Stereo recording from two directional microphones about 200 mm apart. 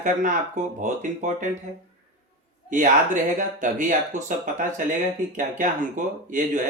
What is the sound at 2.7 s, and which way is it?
Speech, 40° right (ahead or behind).